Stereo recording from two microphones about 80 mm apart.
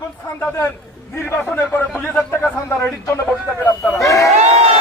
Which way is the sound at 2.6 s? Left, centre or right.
Left.